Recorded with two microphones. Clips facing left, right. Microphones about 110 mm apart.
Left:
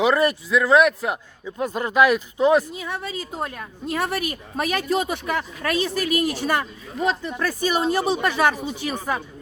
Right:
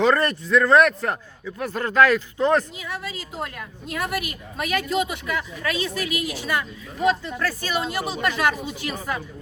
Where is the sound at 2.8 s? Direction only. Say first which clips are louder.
Left 3 dB; 30° left (ahead or behind).